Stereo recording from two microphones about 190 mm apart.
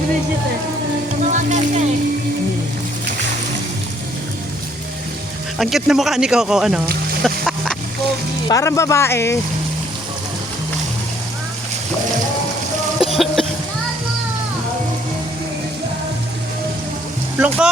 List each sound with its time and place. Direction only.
1.3 s music: 40° right (ahead or behind)
5.5 s speech: centre (ahead or behind)
7.2 s chicken: centre (ahead or behind)
8.4 s speech: 15° left (ahead or behind)
13.0 s cough: centre (ahead or behind)
17.3 s speech: 5° right (ahead or behind)